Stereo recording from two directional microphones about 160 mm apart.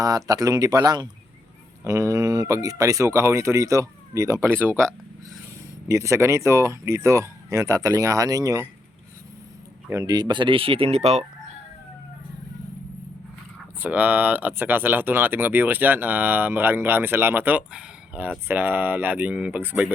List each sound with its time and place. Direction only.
0.0 s speech: 20° right (ahead or behind)
5.9 s speech: 20° right (ahead or behind)
9.9 s speech: 20° right (ahead or behind); by 11.3 s 40° right (ahead or behind)
13.7 s speech: 10° right (ahead or behind)